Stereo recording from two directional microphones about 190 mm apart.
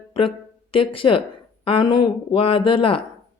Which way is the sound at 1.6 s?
25° left (ahead or behind).